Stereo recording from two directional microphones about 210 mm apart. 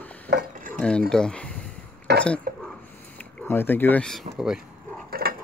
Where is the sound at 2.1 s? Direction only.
50° right (ahead or behind).